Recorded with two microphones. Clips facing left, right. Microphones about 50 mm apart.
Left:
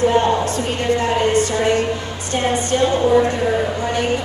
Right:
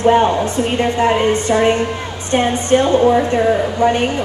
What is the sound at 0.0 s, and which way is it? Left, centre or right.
A woman's voice, right.